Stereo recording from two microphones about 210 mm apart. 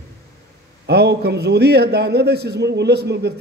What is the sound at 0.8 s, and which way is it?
A man's voice, 50° right (ahead or behind).